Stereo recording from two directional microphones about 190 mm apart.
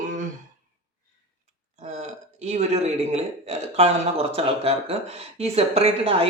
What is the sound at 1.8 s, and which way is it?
A man's voice, 35° right (ahead or behind).